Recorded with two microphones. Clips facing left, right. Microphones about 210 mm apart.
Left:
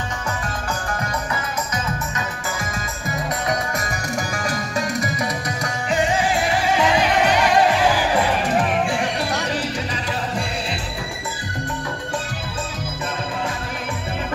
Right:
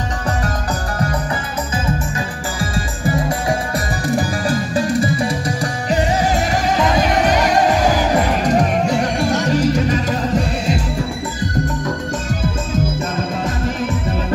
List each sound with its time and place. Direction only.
1.9 s music: 30° right (ahead or behind)